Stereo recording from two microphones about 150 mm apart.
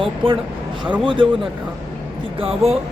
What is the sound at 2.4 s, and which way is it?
Speech, 40° right (ahead or behind).